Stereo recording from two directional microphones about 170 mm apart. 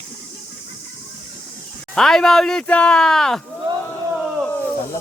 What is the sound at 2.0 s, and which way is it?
Speech, 5° left (ahead or behind).